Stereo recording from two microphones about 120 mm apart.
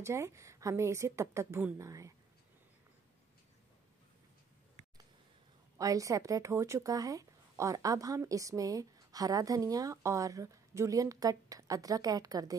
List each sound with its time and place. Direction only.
0.0 s speech: 25° right (ahead or behind)
5.8 s speech: 30° right (ahead or behind)